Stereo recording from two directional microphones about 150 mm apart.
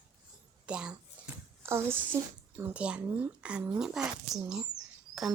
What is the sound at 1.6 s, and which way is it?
A child's voice, 15° right (ahead or behind).